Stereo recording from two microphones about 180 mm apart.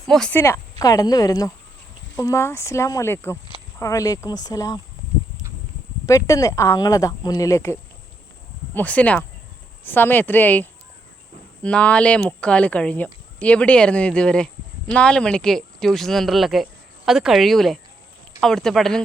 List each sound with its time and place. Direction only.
0.1 s speech: 5° left (ahead or behind)
6.1 s speech: 15° left (ahead or behind); by 19.0 s centre (ahead or behind)